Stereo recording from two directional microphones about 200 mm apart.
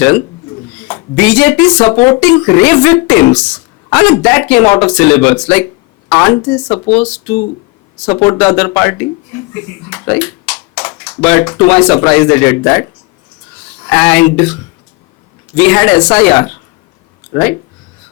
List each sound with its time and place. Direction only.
0.9 s speech: 10° left (ahead or behind)
8.0 s speech: 10° left (ahead or behind)
15.5 s speech: 10° left (ahead or behind)